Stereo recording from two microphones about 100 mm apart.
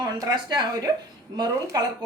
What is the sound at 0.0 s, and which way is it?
Speech, 45° right (ahead or behind).